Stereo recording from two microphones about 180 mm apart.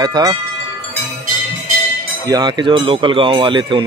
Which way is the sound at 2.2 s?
20° right (ahead or behind).